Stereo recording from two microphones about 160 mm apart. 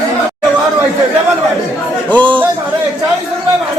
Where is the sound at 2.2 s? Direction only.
30° right (ahead or behind).